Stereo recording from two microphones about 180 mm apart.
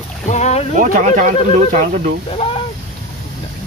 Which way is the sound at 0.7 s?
45° right (ahead or behind).